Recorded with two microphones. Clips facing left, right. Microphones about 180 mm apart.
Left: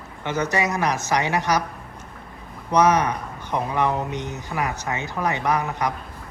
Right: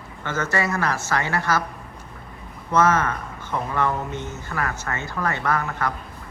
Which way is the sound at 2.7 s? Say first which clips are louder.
Left 1 dB; 15° left (ahead or behind).